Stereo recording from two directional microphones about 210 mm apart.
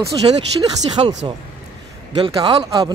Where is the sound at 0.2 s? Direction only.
25° right (ahead or behind).